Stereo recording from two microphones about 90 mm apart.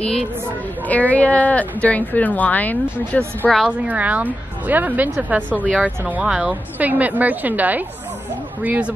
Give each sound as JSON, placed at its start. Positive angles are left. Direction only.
{"t": 0.0, "sound": "speech", "side_deg": 10}
{"t": 3.6, "sound": "a woman's voice", "side_deg": -15}
{"t": 5.5, "sound": "speech", "side_deg": 15}
{"t": 6.0, "sound": "a woman's voice", "side_deg": -10}